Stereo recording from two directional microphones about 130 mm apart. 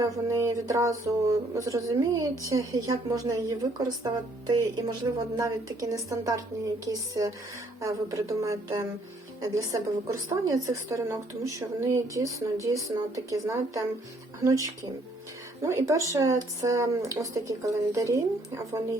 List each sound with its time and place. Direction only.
0.3 s a woman's voice: 25° right (ahead or behind)